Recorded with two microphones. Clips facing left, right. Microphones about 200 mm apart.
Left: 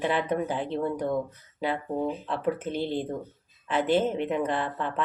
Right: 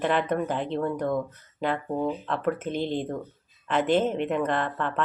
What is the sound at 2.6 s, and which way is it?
Speech, 15° right (ahead or behind).